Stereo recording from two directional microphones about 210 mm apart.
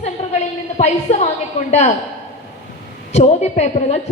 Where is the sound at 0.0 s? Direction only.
30° left (ahead or behind).